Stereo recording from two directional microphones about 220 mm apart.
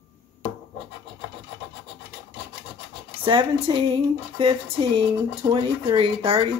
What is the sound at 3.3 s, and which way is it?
Speech, 20° right (ahead or behind).